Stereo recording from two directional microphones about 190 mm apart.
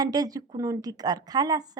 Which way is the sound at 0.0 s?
20° right (ahead or behind).